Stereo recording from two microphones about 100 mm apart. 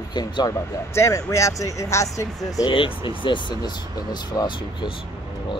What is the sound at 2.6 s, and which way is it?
Speech, 60° left (ahead or behind).